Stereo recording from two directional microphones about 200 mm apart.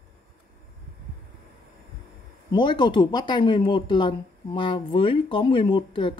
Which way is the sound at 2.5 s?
20° left (ahead or behind).